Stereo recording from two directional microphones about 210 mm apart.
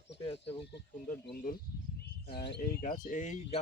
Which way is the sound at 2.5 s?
45° left (ahead or behind).